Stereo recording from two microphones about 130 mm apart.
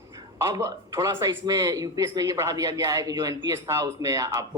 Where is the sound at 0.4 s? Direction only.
25° right (ahead or behind).